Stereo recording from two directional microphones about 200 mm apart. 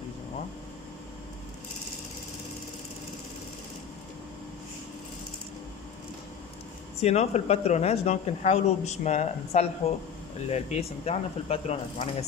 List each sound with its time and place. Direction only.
7.0 s speech: 30° left (ahead or behind)